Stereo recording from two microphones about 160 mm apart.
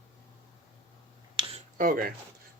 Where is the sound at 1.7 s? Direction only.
60° right (ahead or behind).